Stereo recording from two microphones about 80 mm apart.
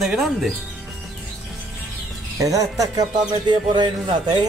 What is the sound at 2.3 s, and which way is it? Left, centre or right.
Speech, right.